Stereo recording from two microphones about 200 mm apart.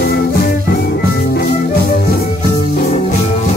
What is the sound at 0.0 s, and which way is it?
Music, 50° left (ahead or behind).